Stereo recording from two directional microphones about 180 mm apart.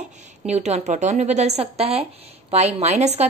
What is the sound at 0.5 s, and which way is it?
A woman's voice, 40° right (ahead or behind).